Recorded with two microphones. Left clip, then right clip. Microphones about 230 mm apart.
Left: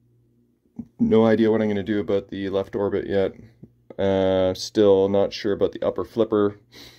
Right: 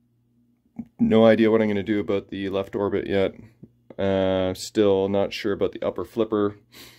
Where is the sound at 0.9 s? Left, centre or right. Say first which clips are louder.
Right 1 dB; centre.